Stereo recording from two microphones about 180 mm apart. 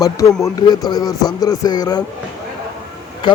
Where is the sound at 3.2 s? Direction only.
25° left (ahead or behind).